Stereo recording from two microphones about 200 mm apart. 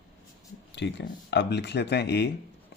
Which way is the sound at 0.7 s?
60° left (ahead or behind).